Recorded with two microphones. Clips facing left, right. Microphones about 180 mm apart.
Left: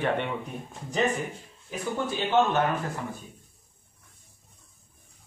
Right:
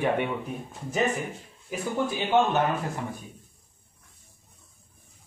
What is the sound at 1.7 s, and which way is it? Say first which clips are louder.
Speech: right 2 dB; 10° right (ahead or behind).